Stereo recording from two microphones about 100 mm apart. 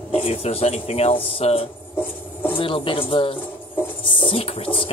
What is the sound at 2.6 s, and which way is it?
Speech, 60° left (ahead or behind).